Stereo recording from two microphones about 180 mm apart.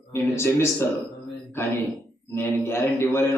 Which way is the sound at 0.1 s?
15° left (ahead or behind).